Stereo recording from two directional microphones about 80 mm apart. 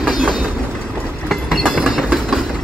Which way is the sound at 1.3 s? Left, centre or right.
Centre.